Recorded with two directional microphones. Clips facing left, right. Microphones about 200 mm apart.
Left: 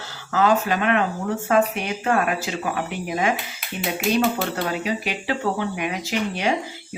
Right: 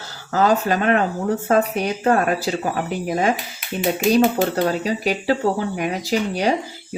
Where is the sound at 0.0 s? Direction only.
40° right (ahead or behind).